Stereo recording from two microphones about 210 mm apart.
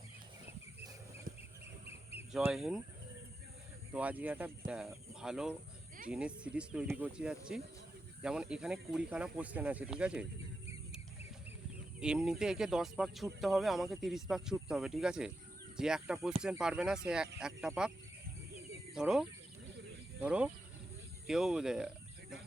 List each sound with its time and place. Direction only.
1.9 s a sound: 30° left (ahead or behind)
2.3 s speech: centre (ahead or behind)
3.9 s speech: 5° right (ahead or behind)
11.9 s speech: 5° right (ahead or behind)
18.9 s speech: 5° right (ahead or behind)